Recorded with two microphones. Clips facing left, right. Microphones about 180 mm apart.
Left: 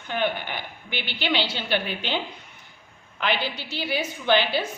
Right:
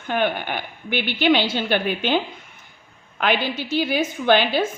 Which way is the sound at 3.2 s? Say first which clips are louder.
Right 5 dB; 50° right (ahead or behind).